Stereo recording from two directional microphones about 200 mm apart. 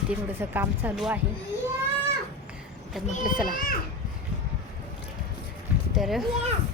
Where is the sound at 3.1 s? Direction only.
40° left (ahead or behind).